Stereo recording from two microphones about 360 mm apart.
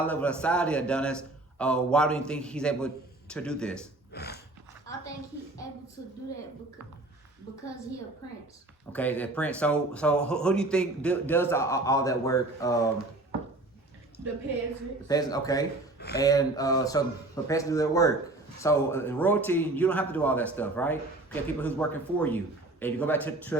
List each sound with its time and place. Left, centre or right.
0.0 s speech: centre
4.1 s a sound: left
8.9 s speech: centre
15.0 s speech: centre